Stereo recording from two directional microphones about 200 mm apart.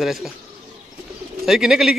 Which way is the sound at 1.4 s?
Centre (ahead or behind).